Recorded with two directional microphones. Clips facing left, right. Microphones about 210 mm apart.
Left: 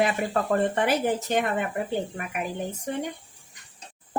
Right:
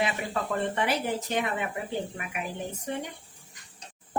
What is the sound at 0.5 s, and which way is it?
Speech, 50° left (ahead or behind).